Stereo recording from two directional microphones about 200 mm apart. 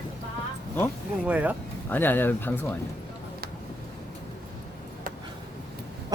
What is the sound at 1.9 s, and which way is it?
Speech, 10° left (ahead or behind).